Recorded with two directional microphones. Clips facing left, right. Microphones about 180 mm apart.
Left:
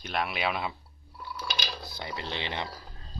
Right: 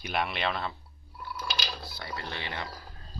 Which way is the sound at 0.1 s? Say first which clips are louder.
Even; centre (ahead or behind).